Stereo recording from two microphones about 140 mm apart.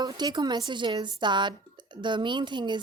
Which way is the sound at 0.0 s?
30° right (ahead or behind).